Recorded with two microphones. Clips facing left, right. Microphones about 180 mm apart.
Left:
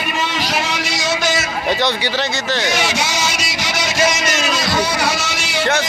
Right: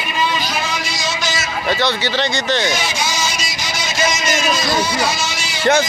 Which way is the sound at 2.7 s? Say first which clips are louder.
Left 2 dB; 70° left (ahead or behind).